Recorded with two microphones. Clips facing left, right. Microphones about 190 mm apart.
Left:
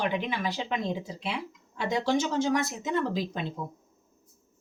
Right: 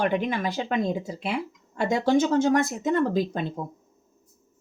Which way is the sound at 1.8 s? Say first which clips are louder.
Right 5 dB; 50° right (ahead or behind).